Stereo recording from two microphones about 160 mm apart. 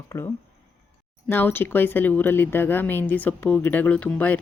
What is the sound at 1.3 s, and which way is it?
Speech, 15° left (ahead or behind).